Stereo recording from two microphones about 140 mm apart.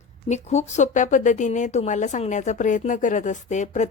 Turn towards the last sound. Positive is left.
turn(degrees=60)  # may be behind; listen again after turning